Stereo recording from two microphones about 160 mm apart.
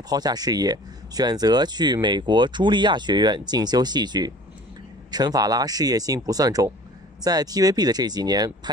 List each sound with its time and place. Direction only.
0.1 s speech: 25° right (ahead or behind)